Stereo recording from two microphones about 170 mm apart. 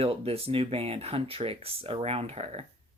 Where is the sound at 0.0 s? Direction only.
35° right (ahead or behind).